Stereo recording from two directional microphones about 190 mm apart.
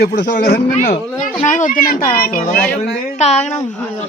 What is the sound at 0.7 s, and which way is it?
Speech, 40° left (ahead or behind).